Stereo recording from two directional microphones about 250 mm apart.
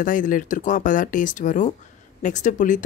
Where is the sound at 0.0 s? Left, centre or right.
Left.